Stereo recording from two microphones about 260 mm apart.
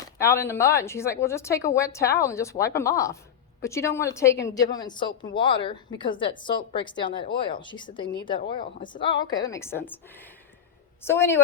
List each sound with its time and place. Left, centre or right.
0.2 s a woman's voice: centre